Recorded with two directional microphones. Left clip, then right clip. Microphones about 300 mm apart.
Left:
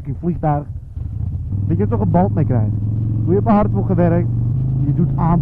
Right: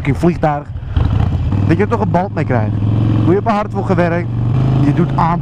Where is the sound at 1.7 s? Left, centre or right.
Centre.